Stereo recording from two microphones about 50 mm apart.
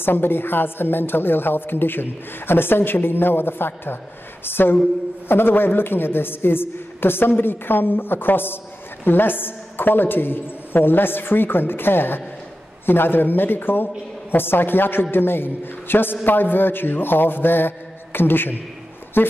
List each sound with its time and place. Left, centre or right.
0.0 s a man's voice: left